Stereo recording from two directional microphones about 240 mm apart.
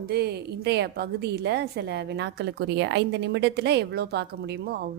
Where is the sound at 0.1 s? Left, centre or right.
Right.